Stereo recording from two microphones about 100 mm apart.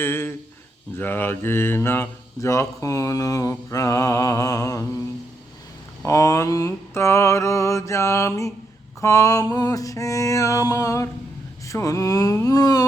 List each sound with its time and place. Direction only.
0.0 s speech: 25° left (ahead or behind)
3.7 s mantra: 35° left (ahead or behind)
6.1 s mantra: 30° left (ahead or behind)